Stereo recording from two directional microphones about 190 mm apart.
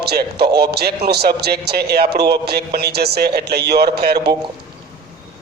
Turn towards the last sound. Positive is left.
turn(degrees=-55)  # may be behind; listen again after turning